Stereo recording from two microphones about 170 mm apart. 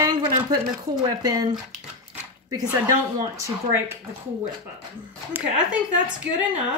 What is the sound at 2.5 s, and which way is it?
Speech, 20° right (ahead or behind).